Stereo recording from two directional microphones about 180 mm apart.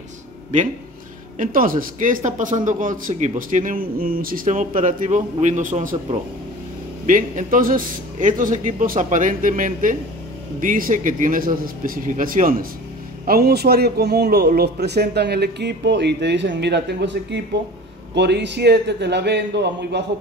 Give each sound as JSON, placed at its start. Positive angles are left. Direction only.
{"t": 1.4, "sound": "a man's voice", "side_deg": -50}
{"t": 7.1, "sound": "a man's voice", "side_deg": -50}
{"t": 13.3, "sound": "a man's voice", "side_deg": -60}